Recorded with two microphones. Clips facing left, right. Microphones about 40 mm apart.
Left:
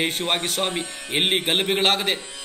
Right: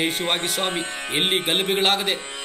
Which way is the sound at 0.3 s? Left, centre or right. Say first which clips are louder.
Even; centre.